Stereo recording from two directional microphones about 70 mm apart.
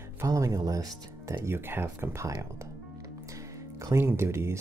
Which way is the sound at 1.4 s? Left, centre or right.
Right.